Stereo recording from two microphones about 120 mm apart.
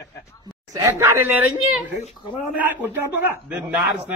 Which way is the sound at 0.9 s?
20° right (ahead or behind).